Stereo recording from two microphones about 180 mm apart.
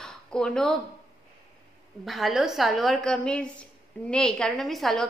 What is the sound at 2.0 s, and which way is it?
A woman's voice, centre (ahead or behind).